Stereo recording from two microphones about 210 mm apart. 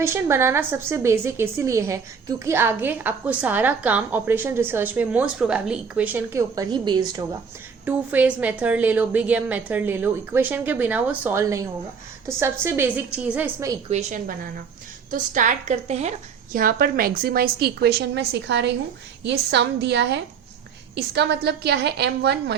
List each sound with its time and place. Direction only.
0.0 s a woman's voice: 10° right (ahead or behind)
7.9 s a woman's voice: 5° right (ahead or behind)
13.9 s a woman's voice: 35° right (ahead or behind); by 22.5 s 55° right (ahead or behind)